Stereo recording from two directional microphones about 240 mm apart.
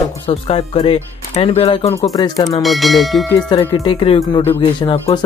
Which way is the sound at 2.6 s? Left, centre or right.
Centre.